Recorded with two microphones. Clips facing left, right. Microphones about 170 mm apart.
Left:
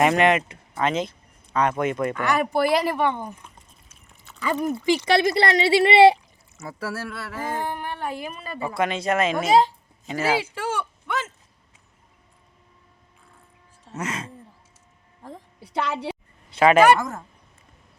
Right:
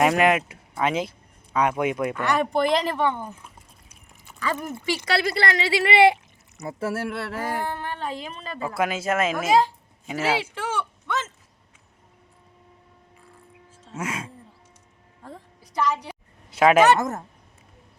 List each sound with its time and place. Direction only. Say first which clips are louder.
0.0 s speech: left 1 dB; centre (ahead or behind); by 3.4 s 15° left (ahead or behind)
3.4 s dog: right 1 dB; 10° right (ahead or behind)
4.4 s speech: left 4 dB; 15° left (ahead or behind)
6.6 s speech: right 4 dB; 25° right (ahead or behind)
7.6 s speech: left 1 dB; 15° left (ahead or behind)
8.7 s speech: left 1 dB; 5° right (ahead or behind)
9.5 s speech: left 2 dB; 20° left (ahead or behind)
13.9 s speech: even; 5° right (ahead or behind)
16.5 s speech: even; 5° right (ahead or behind)